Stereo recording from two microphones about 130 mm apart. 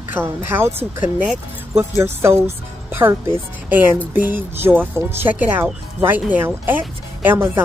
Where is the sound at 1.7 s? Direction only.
20° right (ahead or behind).